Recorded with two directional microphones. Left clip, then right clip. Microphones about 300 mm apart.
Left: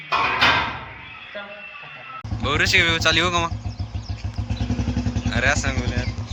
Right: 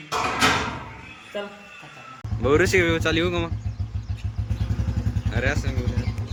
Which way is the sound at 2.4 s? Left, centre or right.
Centre.